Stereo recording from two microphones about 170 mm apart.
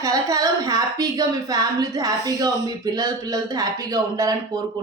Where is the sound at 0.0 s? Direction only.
20° right (ahead or behind).